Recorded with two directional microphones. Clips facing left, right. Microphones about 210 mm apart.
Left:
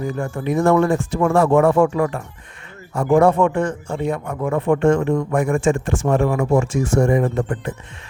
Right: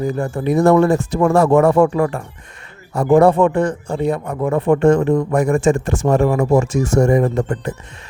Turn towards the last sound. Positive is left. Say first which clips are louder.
# right 2 dB
turn(degrees=-40)  # may be behind; listen again after turning